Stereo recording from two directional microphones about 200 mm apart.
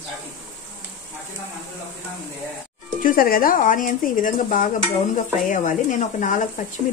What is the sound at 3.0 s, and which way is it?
Speech, 45° left (ahead or behind).